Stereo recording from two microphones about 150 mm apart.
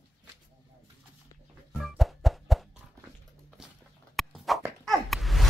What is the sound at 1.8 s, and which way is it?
Music, centre (ahead or behind).